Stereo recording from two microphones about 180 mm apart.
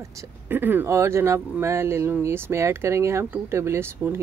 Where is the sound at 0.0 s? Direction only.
15° right (ahead or behind).